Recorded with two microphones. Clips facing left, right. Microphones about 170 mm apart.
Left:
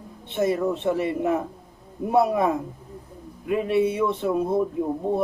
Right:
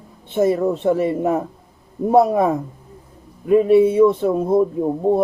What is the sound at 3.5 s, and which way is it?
Speech, 45° right (ahead or behind).